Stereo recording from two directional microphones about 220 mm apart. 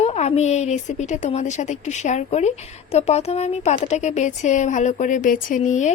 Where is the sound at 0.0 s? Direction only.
30° left (ahead or behind).